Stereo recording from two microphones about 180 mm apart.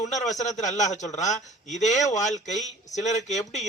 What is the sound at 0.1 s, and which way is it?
Speech, 40° left (ahead or behind).